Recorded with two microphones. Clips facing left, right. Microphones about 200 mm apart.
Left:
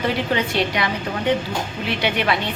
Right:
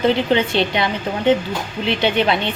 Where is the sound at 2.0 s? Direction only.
25° right (ahead or behind).